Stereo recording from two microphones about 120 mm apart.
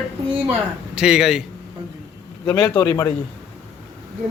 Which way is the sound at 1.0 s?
5° right (ahead or behind).